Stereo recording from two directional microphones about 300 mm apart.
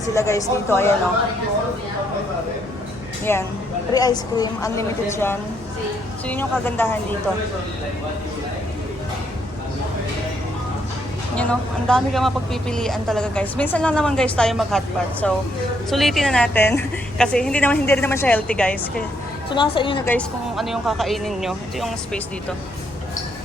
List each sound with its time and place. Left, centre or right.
0.0 s a woman's voice: centre
3.3 s a woman's voice: centre
11.3 s a woman's voice: centre
19.5 s a woman's voice: centre
20.1 s a woman's voice: centre